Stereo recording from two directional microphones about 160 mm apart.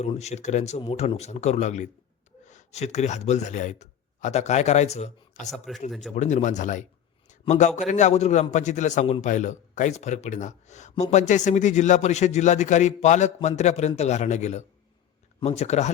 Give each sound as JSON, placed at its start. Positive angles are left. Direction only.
{"t": 0.0, "sound": "speech", "side_deg": 45}
{"t": 5.9, "sound": "speech", "side_deg": 0}
{"t": 6.1, "sound": "speech", "side_deg": 50}